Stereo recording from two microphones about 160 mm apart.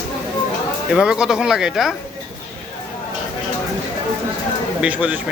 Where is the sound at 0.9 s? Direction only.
5° right (ahead or behind).